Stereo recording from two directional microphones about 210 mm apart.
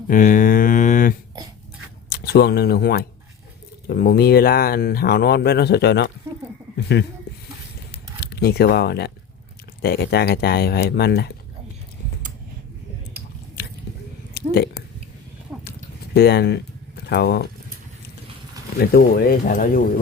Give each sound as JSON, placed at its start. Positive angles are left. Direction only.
{"t": 0.1, "sound": "mantra", "side_deg": 40}
{"t": 2.2, "sound": "speech", "side_deg": 50}
{"t": 8.2, "sound": "speech", "side_deg": 50}
{"t": 14.3, "sound": "a sound", "side_deg": 50}
{"t": 16.1, "sound": "speech", "side_deg": 50}
{"t": 18.8, "sound": "speech", "side_deg": 45}